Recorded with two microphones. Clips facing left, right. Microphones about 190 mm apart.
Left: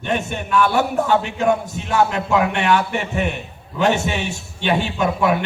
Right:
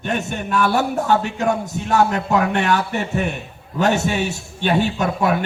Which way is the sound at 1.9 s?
40° right (ahead or behind).